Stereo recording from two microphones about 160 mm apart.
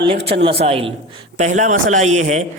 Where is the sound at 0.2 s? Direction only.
90° right.